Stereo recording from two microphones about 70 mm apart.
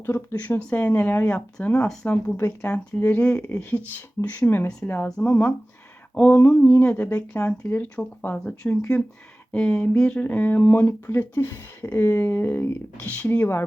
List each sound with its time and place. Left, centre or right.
0.0 s speech: left
2.3 s speech: left
2.6 s speech: left